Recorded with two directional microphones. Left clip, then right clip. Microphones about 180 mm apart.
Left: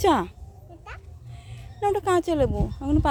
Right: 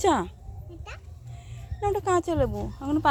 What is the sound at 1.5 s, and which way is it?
Speech, 15° left (ahead or behind).